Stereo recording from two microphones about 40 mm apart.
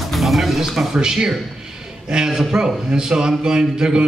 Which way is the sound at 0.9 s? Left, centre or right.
Centre.